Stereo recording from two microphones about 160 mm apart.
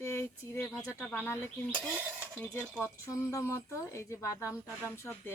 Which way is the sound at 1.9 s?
10° right (ahead or behind).